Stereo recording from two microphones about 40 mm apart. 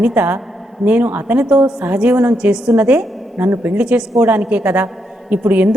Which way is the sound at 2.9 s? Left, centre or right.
Right.